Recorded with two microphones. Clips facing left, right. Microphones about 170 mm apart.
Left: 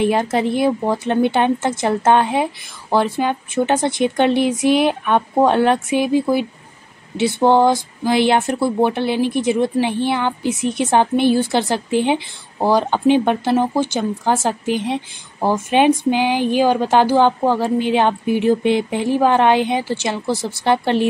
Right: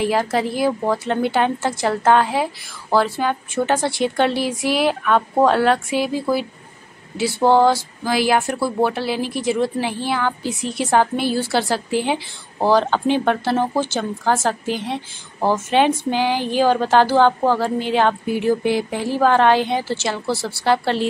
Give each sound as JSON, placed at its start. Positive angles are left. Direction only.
{"t": 0.0, "sound": "a woman's voice", "side_deg": 20}